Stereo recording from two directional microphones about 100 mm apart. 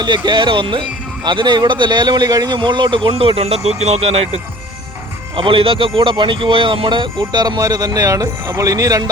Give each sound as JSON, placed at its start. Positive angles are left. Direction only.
{"t": 0.0, "sound": "speech", "side_deg": -50}
{"t": 5.4, "sound": "a man's voice", "side_deg": -65}